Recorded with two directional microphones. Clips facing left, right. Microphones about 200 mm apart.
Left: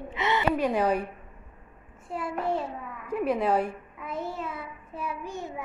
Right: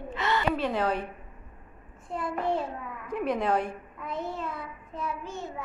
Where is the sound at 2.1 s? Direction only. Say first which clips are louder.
Even; 5° left (ahead or behind).